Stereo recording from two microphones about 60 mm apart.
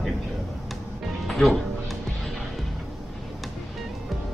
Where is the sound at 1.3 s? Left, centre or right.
Centre.